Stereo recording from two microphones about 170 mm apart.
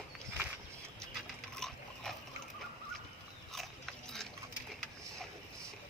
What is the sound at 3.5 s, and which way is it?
Biting, centre (ahead or behind).